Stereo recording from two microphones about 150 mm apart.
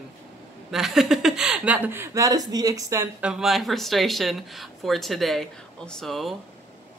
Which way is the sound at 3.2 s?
5° right (ahead or behind).